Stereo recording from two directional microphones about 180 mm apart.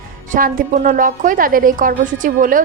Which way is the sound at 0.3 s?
50° right (ahead or behind).